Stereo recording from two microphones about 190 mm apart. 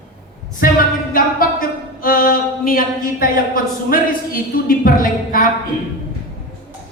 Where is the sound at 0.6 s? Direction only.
50° left (ahead or behind).